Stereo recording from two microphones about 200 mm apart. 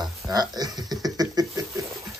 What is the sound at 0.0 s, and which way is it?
Speech, 20° right (ahead or behind).